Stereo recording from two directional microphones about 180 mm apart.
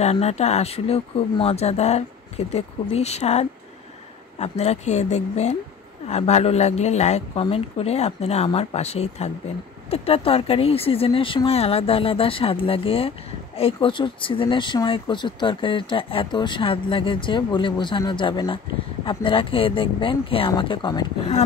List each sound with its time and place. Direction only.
0.0 s speech: 35° left (ahead or behind)